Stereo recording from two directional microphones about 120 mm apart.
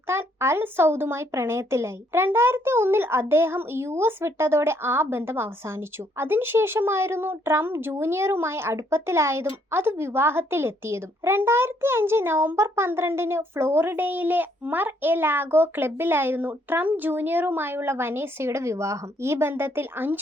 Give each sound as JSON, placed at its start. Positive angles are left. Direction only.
{"t": 0.1, "sound": "speech", "side_deg": -20}